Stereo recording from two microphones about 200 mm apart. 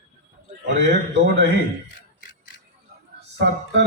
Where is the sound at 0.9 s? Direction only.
55° right (ahead or behind).